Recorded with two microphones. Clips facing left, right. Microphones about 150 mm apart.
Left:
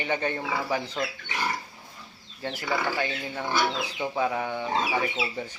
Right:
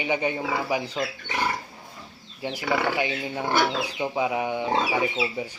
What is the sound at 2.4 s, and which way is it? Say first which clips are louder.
Speech: right 3 dB; 10° right (ahead or behind).